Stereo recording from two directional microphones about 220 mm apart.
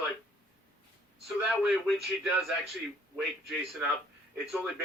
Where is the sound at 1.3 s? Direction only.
5° right (ahead or behind).